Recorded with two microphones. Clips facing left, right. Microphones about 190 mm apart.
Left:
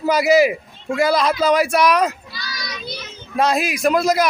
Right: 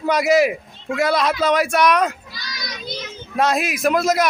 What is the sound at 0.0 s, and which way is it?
Speech, centre (ahead or behind).